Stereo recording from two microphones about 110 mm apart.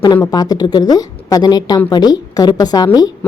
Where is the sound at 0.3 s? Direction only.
35° left (ahead or behind).